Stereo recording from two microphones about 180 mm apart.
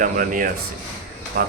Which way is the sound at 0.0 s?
50° right (ahead or behind).